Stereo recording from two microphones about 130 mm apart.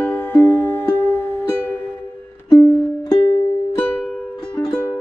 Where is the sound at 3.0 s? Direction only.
30° left (ahead or behind).